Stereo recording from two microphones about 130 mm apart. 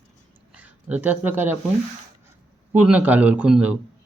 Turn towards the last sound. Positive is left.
turn(degrees=-10)  # may be behind; listen again after turning